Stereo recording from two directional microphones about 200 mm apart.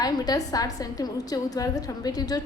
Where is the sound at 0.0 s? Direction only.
20° left (ahead or behind).